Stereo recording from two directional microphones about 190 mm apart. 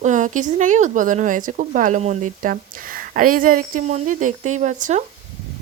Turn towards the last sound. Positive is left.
turn(degrees=-40)  # may be behind; listen again after turning